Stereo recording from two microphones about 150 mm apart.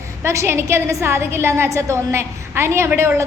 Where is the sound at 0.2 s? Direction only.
20° right (ahead or behind).